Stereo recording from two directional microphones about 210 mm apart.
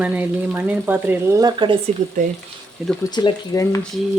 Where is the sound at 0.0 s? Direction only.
5° right (ahead or behind).